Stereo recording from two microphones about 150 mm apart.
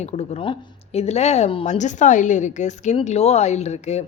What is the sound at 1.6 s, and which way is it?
Speech, 55° left (ahead or behind).